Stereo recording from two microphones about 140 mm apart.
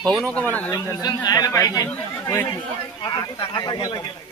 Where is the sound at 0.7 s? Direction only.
25° left (ahead or behind).